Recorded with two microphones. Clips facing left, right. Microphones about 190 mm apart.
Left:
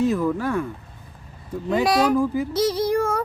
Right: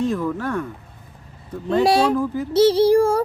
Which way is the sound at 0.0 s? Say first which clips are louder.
Left 1 dB; 5° left (ahead or behind).